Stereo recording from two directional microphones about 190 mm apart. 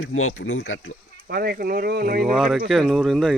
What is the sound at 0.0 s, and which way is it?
Speech, 90° left.